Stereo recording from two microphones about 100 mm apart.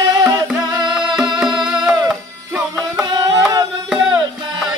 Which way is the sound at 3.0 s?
30° right (ahead or behind).